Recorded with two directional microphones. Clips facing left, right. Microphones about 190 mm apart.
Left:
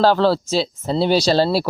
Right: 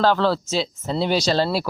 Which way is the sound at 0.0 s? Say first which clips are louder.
Left 4 dB; 35° left (ahead or behind).